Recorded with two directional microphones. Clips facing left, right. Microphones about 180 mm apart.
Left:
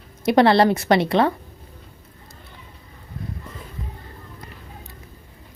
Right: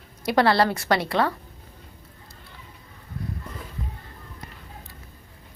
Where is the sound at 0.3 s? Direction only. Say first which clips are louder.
Left 5 dB; 20° left (ahead or behind).